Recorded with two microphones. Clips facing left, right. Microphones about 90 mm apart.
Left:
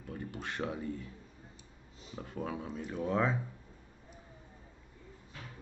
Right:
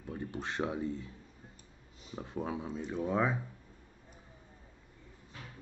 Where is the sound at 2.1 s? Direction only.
15° right (ahead or behind).